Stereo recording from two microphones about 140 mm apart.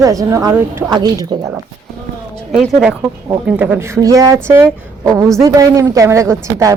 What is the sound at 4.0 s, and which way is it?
A woman's voice, 25° right (ahead or behind).